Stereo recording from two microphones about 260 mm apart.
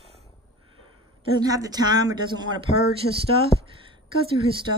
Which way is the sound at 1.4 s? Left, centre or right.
Centre.